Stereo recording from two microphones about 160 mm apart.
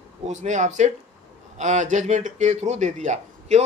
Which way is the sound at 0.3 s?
50° right (ahead or behind).